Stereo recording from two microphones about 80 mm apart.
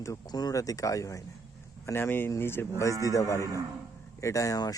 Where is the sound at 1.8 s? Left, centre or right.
Left.